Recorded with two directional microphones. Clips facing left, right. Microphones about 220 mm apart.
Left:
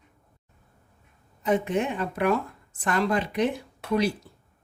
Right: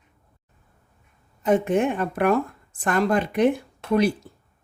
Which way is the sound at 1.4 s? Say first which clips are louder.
Right 4 dB; 50° right (ahead or behind).